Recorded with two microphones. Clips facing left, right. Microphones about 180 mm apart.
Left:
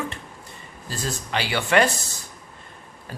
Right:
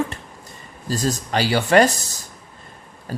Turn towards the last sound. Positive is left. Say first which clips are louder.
# right 9 dB
turn(degrees=-40)  # may be behind; listen again after turning